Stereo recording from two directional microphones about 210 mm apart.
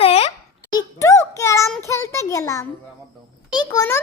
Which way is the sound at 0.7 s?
15° left (ahead or behind).